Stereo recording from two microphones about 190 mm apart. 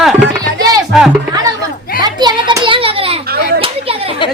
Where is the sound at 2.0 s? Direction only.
25° right (ahead or behind).